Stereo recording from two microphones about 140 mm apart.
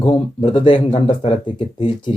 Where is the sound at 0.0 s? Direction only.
30° left (ahead or behind).